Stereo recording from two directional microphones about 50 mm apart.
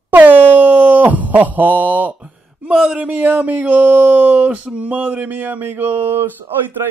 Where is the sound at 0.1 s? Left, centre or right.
Right.